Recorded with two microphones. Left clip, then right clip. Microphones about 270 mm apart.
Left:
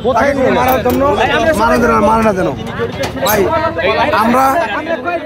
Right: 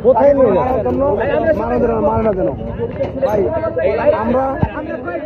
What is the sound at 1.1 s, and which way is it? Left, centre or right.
Speech, centre.